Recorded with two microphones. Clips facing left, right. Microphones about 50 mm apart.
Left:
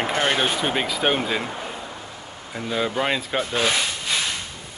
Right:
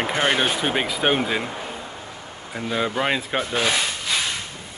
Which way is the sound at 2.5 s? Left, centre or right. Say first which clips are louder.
Even; centre.